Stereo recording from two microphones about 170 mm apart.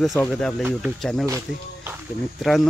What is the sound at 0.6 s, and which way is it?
Speech, 5° right (ahead or behind).